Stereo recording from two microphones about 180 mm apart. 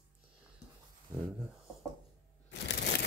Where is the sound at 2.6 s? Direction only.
70° left (ahead or behind).